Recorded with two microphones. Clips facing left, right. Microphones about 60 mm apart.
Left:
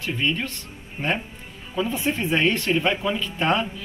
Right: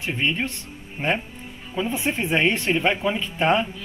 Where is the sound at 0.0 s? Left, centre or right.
Right.